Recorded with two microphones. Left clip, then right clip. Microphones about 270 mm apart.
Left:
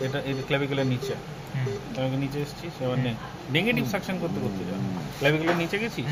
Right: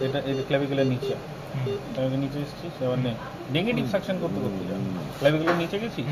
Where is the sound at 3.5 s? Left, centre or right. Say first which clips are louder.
Even; left.